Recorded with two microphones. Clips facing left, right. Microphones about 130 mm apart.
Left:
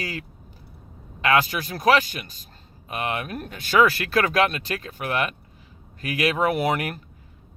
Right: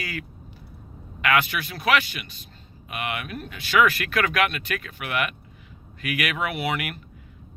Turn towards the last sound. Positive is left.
turn(degrees=40)  # may be behind; listen again after turning